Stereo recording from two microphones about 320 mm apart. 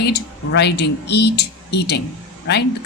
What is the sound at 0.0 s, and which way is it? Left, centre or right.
Speech, left.